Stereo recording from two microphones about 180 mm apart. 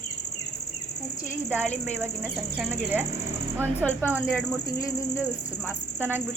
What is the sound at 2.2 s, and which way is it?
Speech, centre (ahead or behind).